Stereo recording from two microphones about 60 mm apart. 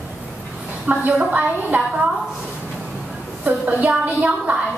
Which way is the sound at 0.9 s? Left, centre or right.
Right.